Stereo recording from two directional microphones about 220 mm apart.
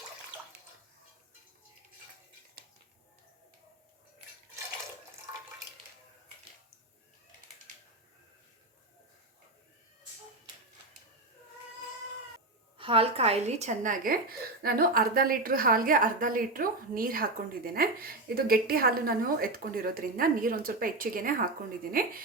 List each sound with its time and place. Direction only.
12.7 s a woman's voice: 25° right (ahead or behind); by 22.1 s 40° right (ahead or behind)